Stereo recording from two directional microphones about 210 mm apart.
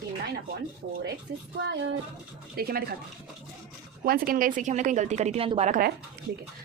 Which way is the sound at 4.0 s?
40° right (ahead or behind).